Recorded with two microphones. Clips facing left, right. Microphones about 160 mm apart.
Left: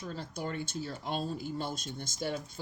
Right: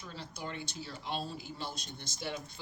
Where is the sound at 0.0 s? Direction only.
45° left (ahead or behind).